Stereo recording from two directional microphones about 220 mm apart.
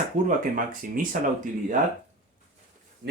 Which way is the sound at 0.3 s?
40° right (ahead or behind).